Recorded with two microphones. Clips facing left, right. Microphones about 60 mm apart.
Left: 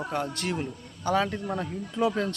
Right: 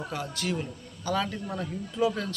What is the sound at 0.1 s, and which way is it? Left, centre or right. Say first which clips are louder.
Speech: left 2 dB; left.